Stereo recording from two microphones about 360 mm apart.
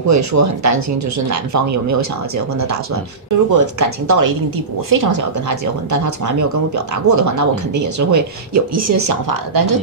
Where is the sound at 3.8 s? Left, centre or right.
Right.